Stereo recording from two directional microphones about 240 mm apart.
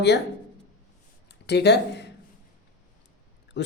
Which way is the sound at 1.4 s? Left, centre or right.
Left.